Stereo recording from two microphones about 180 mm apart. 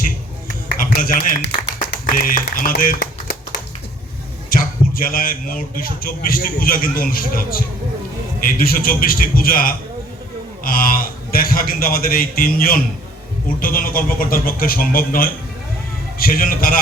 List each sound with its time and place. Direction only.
0.7 s a sound: 50° left (ahead or behind)
2.0 s speech: 50° left (ahead or behind)
4.4 s a man's voice: 50° left (ahead or behind)